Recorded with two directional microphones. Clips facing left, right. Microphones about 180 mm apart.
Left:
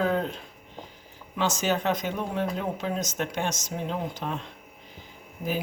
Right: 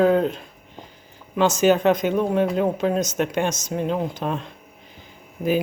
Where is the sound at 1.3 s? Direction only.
55° right (ahead or behind).